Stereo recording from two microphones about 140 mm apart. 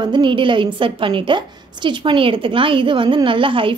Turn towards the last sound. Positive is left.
turn(degrees=-40)  # may be behind; listen again after turning